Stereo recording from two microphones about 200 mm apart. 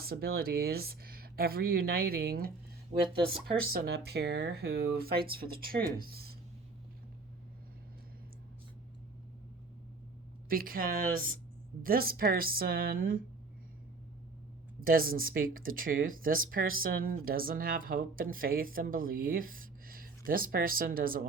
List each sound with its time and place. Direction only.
0.0 s speech: 50° right (ahead or behind)
3.3 s speech: centre (ahead or behind)
3.7 s speech: 50° right (ahead or behind)
10.5 s speech: 45° right (ahead or behind)
14.8 s speech: 45° right (ahead or behind)